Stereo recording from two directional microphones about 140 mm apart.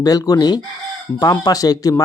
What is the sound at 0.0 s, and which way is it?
Speech, 25° left (ahead or behind).